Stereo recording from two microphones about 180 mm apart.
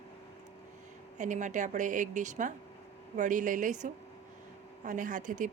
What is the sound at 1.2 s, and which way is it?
Speech, 45° right (ahead or behind).